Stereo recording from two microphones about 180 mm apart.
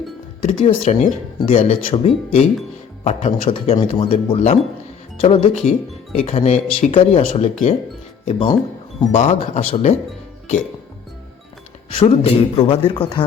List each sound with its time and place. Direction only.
0.4 s speech: 30° left (ahead or behind)
11.9 s a man's voice: 30° left (ahead or behind)